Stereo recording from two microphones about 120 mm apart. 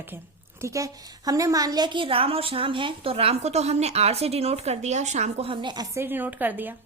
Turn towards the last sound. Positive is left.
turn(degrees=-15)  # may be behind; listen again after turning